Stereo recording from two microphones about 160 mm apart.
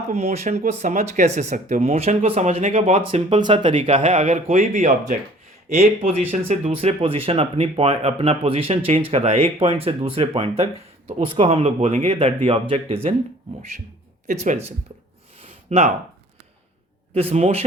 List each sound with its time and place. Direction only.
0.1 s speech: 40° right (ahead or behind)
2.0 s speech: 40° right (ahead or behind)
13.6 s speech: 55° right (ahead or behind)
15.4 s a sound: 40° right (ahead or behind)
17.2 s speech: 40° right (ahead or behind)